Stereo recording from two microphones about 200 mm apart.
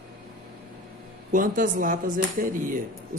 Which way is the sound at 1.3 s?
40° right (ahead or behind).